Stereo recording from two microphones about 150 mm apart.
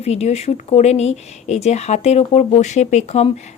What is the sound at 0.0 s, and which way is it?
Speech, 45° left (ahead or behind).